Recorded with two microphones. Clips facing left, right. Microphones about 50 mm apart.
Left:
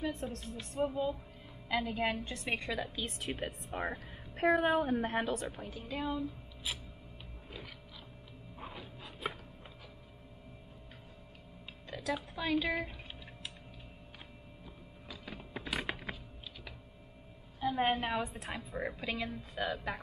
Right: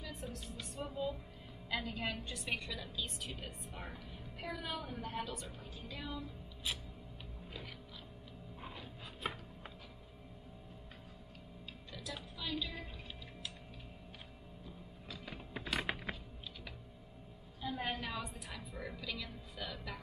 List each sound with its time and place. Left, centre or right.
0.0 s a woman's voice: left
0.7 s a woman's voice: left
3.4 s a woman's voice: left
8.5 s a sound: centre
12.4 s a woman's voice: left
15.0 s music: centre
17.6 s a woman's voice: left